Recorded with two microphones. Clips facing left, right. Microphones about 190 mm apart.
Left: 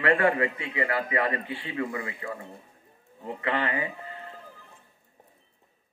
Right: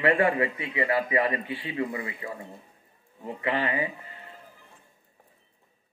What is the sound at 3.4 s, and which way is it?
Speech, 25° right (ahead or behind).